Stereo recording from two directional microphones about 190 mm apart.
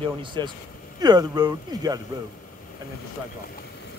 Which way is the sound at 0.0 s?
25° right (ahead or behind).